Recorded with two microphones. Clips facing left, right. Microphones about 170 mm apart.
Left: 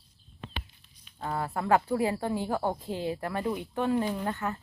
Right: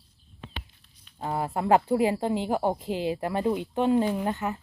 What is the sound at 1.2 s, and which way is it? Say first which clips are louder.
Speech: right 3 dB; 20° right (ahead or behind).